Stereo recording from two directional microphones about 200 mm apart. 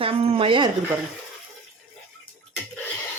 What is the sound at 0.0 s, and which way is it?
Speech, 30° right (ahead or behind).